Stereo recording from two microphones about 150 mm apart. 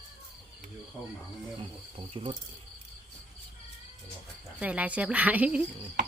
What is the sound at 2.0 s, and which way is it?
Speech, 35° right (ahead or behind).